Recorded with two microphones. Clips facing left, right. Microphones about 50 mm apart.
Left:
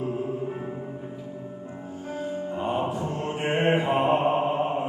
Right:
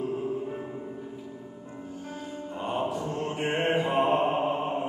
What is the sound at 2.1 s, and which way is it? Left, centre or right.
Music, left.